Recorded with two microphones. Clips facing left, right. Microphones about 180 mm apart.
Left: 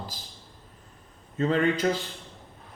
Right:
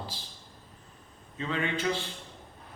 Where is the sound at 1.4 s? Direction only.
45° left (ahead or behind).